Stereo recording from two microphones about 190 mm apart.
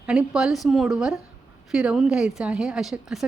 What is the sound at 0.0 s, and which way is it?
A woman's voice, 5° right (ahead or behind).